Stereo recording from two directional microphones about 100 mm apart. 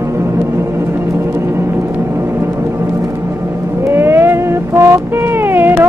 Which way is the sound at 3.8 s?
25° right (ahead or behind).